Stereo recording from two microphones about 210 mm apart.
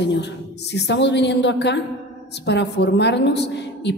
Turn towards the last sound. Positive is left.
turn(degrees=55)  # may be behind; listen again after turning